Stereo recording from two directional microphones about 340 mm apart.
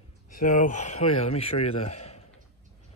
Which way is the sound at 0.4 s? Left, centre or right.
Left.